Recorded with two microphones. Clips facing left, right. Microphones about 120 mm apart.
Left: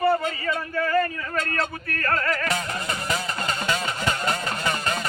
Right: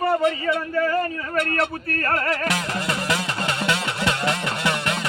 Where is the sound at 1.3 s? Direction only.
65° right (ahead or behind).